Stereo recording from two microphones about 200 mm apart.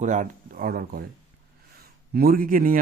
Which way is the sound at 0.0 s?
40° right (ahead or behind).